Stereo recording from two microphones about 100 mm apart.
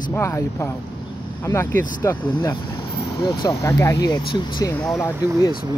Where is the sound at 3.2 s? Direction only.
45° left (ahead or behind).